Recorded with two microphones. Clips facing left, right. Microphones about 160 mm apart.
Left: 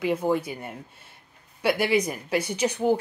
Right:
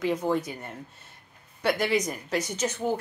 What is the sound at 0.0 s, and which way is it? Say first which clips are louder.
Speech: left 2 dB; 10° left (ahead or behind).